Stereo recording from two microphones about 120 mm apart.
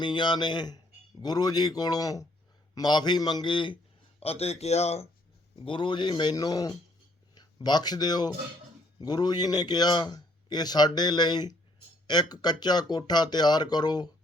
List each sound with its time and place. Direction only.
0.0 s a man's voice: 40° left (ahead or behind)
4.2 s speech: 60° left (ahead or behind)
5.5 s a man's voice: 45° left (ahead or behind)